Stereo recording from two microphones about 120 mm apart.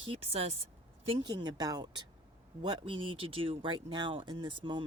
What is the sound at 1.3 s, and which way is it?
Speech, 35° right (ahead or behind).